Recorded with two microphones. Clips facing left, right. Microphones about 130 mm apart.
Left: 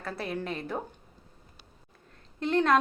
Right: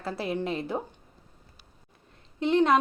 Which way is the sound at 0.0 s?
25° right (ahead or behind).